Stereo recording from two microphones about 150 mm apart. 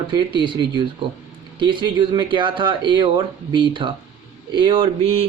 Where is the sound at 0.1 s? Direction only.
30° right (ahead or behind).